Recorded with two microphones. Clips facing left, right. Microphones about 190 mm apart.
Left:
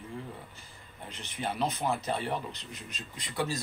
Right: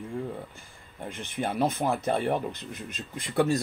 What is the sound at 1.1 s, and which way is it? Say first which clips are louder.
Speech: right 5 dB; 50° right (ahead or behind).